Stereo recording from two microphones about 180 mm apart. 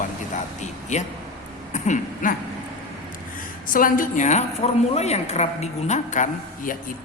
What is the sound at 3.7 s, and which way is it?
A woman's voice, 50° left (ahead or behind).